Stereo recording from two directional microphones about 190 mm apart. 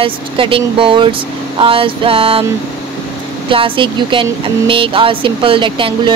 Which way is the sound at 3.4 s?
25° right (ahead or behind).